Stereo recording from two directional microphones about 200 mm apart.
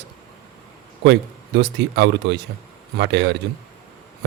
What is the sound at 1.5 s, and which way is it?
Speech, 60° right (ahead or behind).